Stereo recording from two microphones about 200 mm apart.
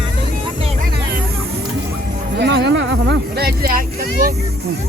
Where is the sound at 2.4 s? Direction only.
60° right (ahead or behind).